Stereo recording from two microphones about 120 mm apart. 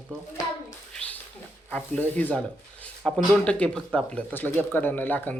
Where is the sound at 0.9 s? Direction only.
10° left (ahead or behind).